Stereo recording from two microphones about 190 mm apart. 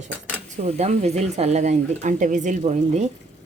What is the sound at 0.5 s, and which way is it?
Speech, 35° right (ahead or behind).